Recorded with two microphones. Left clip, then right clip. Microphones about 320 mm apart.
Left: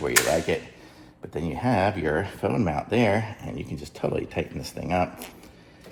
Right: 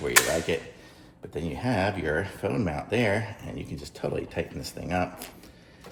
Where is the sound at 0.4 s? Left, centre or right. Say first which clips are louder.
Left 2 dB; centre.